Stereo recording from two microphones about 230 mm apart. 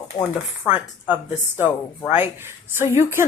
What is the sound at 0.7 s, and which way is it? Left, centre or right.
Speech, centre.